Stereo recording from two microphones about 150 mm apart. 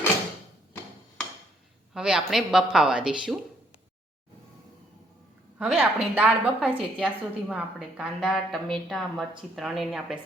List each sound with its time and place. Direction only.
1.9 s a woman's voice: 5° right (ahead or behind)
5.5 s a woman's voice: centre (ahead or behind)